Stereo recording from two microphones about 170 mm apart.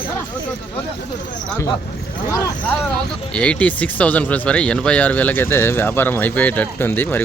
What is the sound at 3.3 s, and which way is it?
Speech, 5° left (ahead or behind).